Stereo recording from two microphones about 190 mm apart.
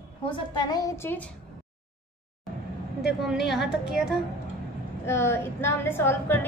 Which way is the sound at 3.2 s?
Centre (ahead or behind).